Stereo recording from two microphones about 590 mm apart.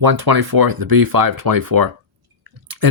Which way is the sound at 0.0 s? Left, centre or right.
Right.